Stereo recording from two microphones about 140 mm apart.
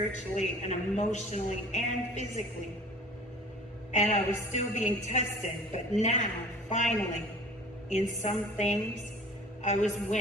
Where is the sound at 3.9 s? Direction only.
55° left (ahead or behind).